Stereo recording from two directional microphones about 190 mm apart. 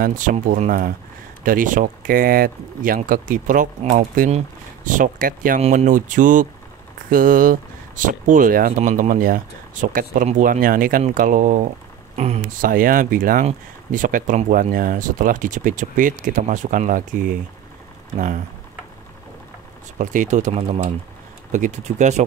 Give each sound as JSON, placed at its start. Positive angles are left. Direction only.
{"t": 0.0, "sound": "speech", "side_deg": -45}
{"t": 20.0, "sound": "speech", "side_deg": -40}